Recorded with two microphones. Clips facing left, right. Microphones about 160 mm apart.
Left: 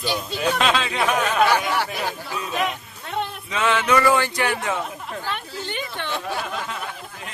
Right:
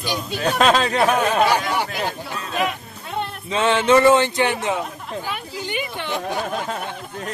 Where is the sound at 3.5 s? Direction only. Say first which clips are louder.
Right 5 dB; 30° right (ahead or behind).